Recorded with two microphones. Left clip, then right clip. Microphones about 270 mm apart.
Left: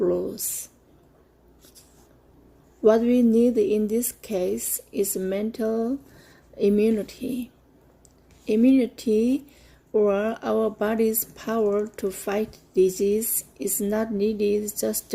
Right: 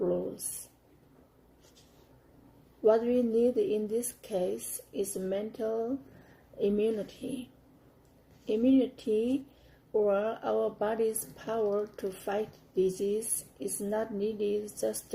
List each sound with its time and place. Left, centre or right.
2.8 s speech: left
8.4 s speech: left